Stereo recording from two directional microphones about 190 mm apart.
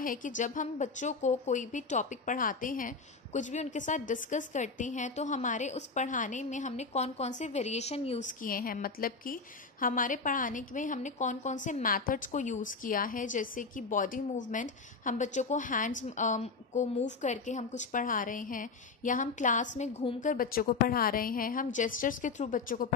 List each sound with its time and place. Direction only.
0.0 s a woman's voice: 45° left (ahead or behind)
19.8 s a woman's voice: 30° left (ahead or behind)
20.2 s a woman's voice: 45° left (ahead or behind)